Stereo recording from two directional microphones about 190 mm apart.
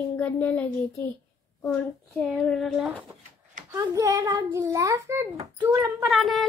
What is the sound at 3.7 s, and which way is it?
A child's voice, 15° right (ahead or behind).